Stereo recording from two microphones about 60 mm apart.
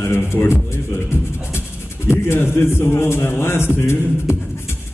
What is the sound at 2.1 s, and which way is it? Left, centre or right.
A man's voice, left.